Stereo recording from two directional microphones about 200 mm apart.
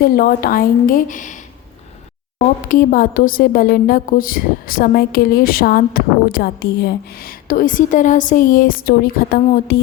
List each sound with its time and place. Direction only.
0.0 s a woman's voice: 50° left (ahead or behind)
2.6 s a woman's voice: 40° left (ahead or behind)